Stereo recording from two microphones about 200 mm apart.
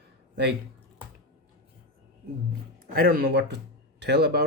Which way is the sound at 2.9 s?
50° right (ahead or behind).